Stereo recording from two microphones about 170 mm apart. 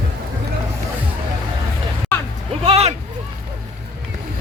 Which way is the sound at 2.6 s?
35° right (ahead or behind).